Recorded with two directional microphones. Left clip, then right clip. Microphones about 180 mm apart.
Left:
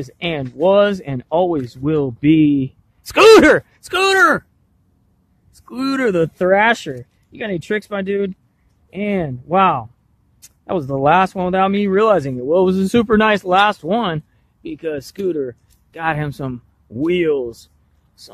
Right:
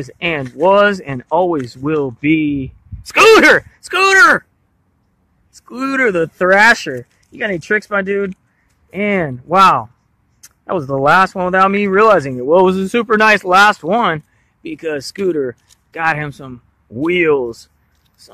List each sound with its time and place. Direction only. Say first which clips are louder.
0.0 s speech: right 4 dB; centre (ahead or behind)
2.1 s a man's voice: left 2 dB; 15° left (ahead or behind)
5.5 s speech: right 2 dB; centre (ahead or behind)
12.8 s speech: right 3 dB; 10° left (ahead or behind)
16.2 s speech: even; 15° left (ahead or behind)
17.0 s speech: right 4 dB; centre (ahead or behind)